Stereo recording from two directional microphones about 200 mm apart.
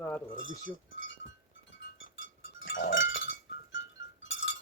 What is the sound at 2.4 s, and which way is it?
Sheep, 70° left (ahead or behind).